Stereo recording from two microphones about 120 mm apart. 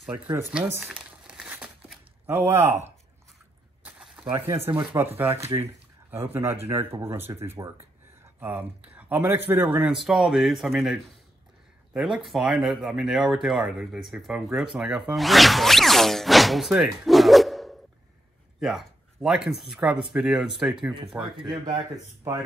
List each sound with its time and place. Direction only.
0.7 s crumpling: 5° right (ahead or behind)
2.2 s speech: 20° right (ahead or behind)
3.8 s a sound: 10° right (ahead or behind)
4.3 s speech: 25° right (ahead or behind)
9.8 s speech: 5° right (ahead or behind)
12.3 s speech: 5° right (ahead or behind)
21.4 s speech: 40° right (ahead or behind)